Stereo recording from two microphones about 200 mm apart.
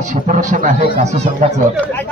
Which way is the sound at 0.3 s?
40° right (ahead or behind).